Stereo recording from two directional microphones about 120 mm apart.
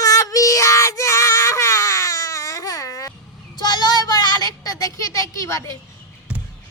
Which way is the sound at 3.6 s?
35° left (ahead or behind).